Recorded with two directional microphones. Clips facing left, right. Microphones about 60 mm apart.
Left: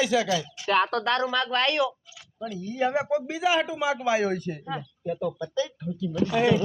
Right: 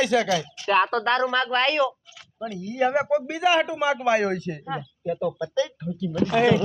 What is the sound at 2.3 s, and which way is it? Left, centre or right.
A man's voice, right.